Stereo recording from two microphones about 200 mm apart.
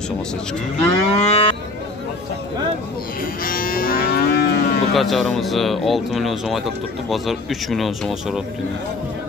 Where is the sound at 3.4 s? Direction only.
45° left (ahead or behind).